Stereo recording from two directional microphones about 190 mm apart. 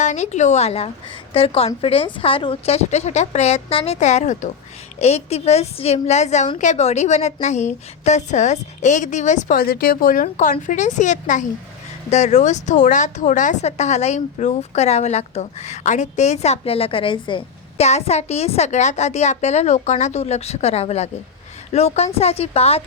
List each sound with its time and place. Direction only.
0.0 s speech: 40° left (ahead or behind)